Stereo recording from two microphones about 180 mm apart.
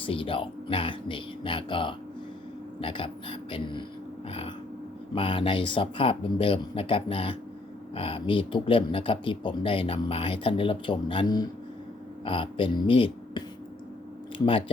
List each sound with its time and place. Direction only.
0.0 s speech: 30° left (ahead or behind)
4.3 s a sound: 30° left (ahead or behind)
5.1 s speech: 30° left (ahead or behind)